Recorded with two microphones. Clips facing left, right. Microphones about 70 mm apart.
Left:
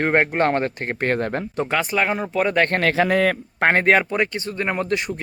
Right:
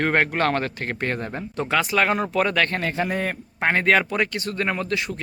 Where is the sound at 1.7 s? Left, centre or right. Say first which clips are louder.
Right 2 dB; left.